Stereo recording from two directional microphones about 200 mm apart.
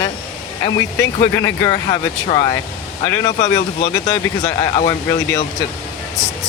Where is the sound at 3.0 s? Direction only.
15° left (ahead or behind).